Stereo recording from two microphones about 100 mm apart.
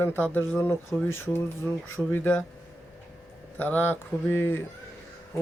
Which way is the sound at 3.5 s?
15° left (ahead or behind).